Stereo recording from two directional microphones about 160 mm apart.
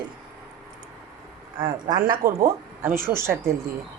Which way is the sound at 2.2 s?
15° right (ahead or behind).